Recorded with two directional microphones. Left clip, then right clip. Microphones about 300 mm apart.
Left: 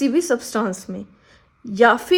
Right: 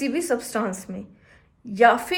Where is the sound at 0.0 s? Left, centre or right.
Left.